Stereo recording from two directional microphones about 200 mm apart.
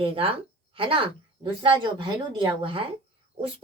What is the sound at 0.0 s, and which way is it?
Speech, 25° right (ahead or behind).